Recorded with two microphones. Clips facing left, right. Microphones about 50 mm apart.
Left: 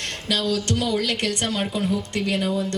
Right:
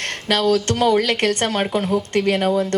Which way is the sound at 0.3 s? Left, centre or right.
Right.